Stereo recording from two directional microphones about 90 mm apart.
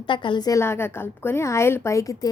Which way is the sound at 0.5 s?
30° left (ahead or behind).